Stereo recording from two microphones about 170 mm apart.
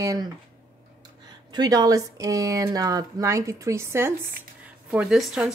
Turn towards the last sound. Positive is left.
turn(degrees=-5)  # may be behind; listen again after turning